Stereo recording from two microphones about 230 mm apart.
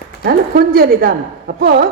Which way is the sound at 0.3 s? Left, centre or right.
Right.